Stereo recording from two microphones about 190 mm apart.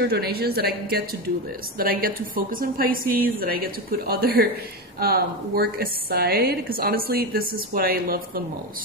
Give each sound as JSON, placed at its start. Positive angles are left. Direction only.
{"t": 0.0, "sound": "a woman's voice", "side_deg": -55}